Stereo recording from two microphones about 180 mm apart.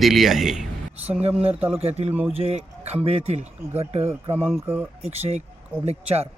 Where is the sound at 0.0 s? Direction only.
Centre (ahead or behind).